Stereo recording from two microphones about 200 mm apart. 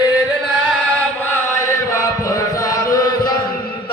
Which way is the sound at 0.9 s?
10° left (ahead or behind).